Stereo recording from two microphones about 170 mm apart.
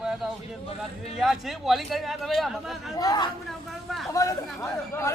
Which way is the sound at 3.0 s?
25° left (ahead or behind).